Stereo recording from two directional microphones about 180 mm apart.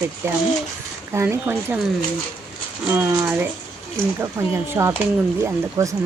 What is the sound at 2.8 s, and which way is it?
Speech, 10° right (ahead or behind).